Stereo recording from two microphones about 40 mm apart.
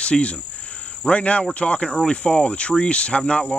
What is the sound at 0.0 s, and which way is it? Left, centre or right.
Cricket, left.